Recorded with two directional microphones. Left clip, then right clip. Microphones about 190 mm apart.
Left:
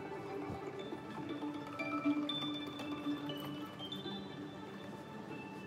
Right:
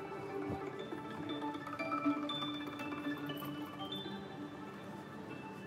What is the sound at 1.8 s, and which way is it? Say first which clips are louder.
Music: even; 20° right (ahead or behind).